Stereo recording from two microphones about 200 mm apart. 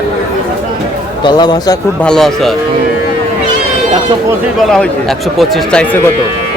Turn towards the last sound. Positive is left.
turn(degrees=10)  # may be behind; listen again after turning